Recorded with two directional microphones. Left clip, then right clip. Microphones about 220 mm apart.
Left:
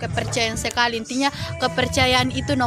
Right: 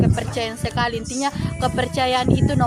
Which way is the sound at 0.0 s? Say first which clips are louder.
Even; 45° left (ahead or behind).